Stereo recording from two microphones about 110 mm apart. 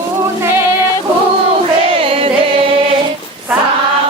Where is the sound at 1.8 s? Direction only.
55° right (ahead or behind).